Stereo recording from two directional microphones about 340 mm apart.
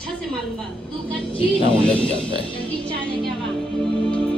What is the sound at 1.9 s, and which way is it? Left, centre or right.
Speech, centre.